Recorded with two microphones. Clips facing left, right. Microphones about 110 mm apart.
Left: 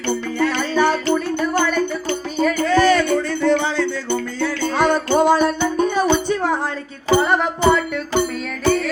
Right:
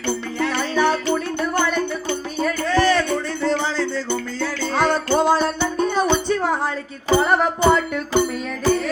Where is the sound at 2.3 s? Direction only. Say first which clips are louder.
Left 4 dB; 15° left (ahead or behind).